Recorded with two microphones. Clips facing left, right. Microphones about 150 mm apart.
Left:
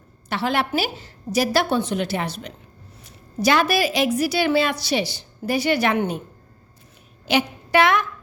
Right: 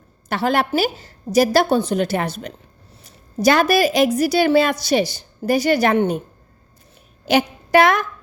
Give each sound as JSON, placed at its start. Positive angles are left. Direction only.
{"t": 0.3, "sound": "a woman's voice", "side_deg": -45}
{"t": 7.3, "sound": "a woman's voice", "side_deg": -45}